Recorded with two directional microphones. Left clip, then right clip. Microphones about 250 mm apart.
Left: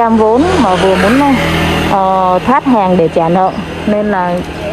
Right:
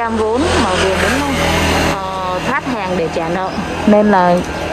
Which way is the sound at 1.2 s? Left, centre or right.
Centre.